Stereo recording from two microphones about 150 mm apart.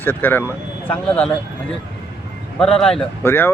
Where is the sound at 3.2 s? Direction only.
15° left (ahead or behind).